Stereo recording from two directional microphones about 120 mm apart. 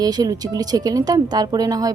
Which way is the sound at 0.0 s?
30° right (ahead or behind).